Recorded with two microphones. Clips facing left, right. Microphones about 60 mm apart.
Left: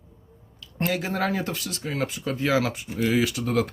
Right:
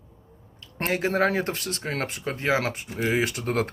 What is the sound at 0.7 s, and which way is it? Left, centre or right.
Speech, right.